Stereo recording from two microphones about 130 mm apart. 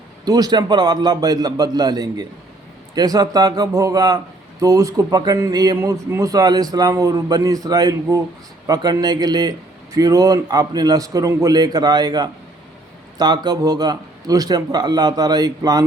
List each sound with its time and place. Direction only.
0.3 s a man's voice: 30° right (ahead or behind)